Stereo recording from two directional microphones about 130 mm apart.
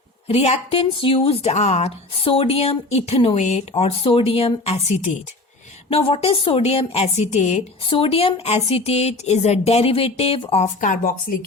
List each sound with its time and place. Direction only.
0.3 s speech: 50° left (ahead or behind)
7.9 s speech: 45° left (ahead or behind)
10.6 s speech: 85° left